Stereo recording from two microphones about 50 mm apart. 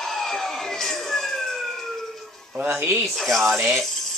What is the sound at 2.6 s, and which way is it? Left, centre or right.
Speech, right.